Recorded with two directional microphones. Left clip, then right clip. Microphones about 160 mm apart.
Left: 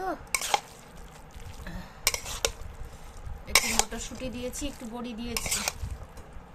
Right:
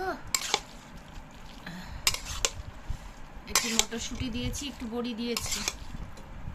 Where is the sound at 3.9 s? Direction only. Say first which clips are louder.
Right 1 dB; 60° left (ahead or behind).